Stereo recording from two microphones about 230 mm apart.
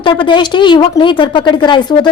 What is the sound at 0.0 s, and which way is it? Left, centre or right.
Speech, left.